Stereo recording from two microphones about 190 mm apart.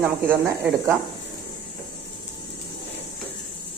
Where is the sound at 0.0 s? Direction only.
10° right (ahead or behind).